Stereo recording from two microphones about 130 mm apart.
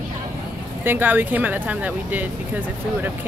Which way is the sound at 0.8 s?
15° right (ahead or behind).